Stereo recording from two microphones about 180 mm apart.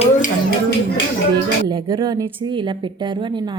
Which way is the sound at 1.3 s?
25° right (ahead or behind).